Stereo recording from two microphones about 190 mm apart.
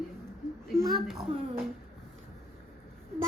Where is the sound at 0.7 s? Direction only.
Centre (ahead or behind).